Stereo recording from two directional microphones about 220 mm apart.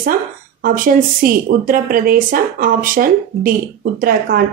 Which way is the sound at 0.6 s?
40° right (ahead or behind).